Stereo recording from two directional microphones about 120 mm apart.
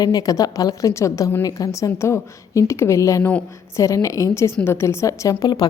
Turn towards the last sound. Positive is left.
turn(degrees=35)  # may be behind; listen again after turning